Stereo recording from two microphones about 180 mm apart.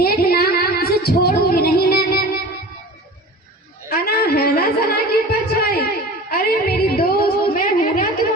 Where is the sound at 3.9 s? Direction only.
55° left (ahead or behind).